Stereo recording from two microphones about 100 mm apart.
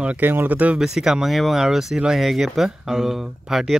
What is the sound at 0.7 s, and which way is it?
Speech, 5° right (ahead or behind).